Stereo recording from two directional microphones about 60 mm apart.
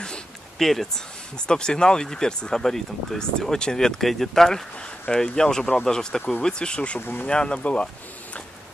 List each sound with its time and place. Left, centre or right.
0.0 s a sound: centre
0.7 s speech: centre
7.0 s speech: left
7.2 s speech: centre